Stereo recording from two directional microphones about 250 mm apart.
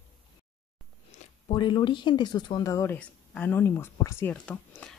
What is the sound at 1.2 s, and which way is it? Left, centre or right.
A woman's voice, left.